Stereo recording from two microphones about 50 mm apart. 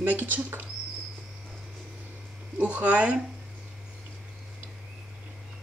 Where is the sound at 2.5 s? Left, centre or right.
Right.